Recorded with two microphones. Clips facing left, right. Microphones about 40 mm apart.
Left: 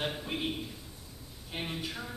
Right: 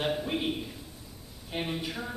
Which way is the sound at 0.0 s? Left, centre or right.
Centre.